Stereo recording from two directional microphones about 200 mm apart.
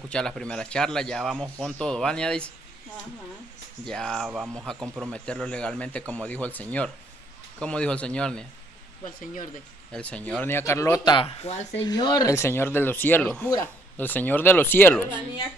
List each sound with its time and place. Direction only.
0.1 s speech: 5° left (ahead or behind)
3.8 s speech: 5° left (ahead or behind)
4.8 s speech: 15° right (ahead or behind)
5.1 s speech: 5° left (ahead or behind)
9.9 s speech: 5° left (ahead or behind); by 11.6 s 30° left (ahead or behind)
11.8 s speech: 20° left (ahead or behind)